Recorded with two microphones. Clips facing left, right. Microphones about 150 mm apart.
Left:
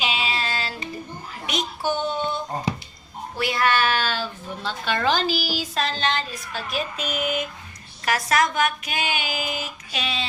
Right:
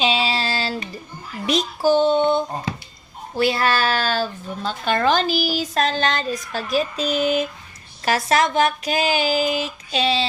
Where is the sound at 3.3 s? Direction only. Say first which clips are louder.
Right 3 dB; 30° right (ahead or behind).